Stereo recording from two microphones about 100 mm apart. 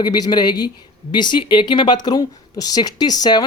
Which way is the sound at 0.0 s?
45° left (ahead or behind).